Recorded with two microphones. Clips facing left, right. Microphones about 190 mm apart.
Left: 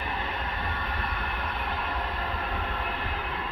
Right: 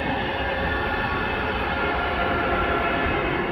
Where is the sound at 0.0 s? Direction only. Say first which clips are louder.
Right 8 dB; 70° right (ahead or behind).